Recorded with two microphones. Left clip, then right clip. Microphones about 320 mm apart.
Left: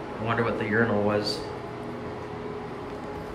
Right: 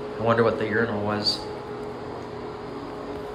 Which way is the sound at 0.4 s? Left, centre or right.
Centre.